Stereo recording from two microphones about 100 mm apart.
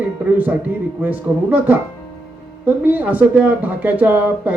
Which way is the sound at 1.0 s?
15° right (ahead or behind).